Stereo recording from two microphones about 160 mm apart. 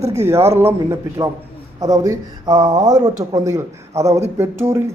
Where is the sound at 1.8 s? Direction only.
25° right (ahead or behind).